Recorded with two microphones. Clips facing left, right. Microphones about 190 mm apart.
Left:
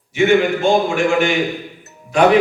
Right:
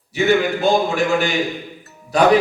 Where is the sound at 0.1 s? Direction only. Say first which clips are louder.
Left 3 dB; 35° right (ahead or behind).